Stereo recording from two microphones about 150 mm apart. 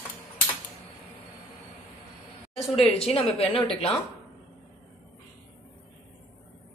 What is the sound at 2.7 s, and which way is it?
Speech, 40° left (ahead or behind).